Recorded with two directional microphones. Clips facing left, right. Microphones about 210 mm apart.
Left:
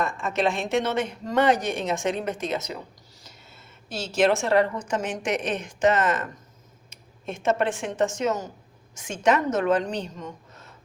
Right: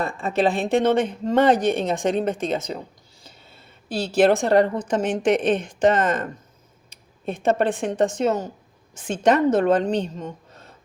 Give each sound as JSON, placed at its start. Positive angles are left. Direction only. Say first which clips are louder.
{"t": 0.0, "sound": "speech", "louder": "right 3 dB", "side_deg": -35}
{"t": 3.2, "sound": "a sound", "louder": "right 2 dB", "side_deg": -30}
{"t": 5.1, "sound": "speech", "louder": "right 8 dB", "side_deg": -30}